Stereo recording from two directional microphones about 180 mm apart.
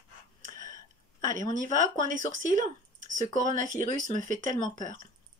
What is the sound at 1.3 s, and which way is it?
Speech, 45° right (ahead or behind).